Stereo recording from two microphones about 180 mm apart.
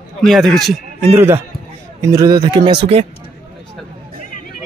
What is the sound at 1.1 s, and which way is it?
A man's voice, 15° right (ahead or behind).